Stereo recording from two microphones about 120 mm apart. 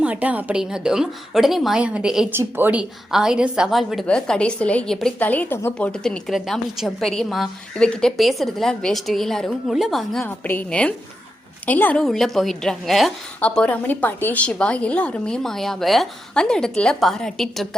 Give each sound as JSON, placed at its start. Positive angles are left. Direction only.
{"t": 0.0, "sound": "a woman's voice", "side_deg": -10}
{"t": 2.3, "sound": "speech", "side_deg": -20}
{"t": 3.1, "sound": "a woman's voice", "side_deg": -5}
{"t": 10.2, "sound": "a woman's voice", "side_deg": 15}
{"t": 12.0, "sound": "a woman's voice", "side_deg": 0}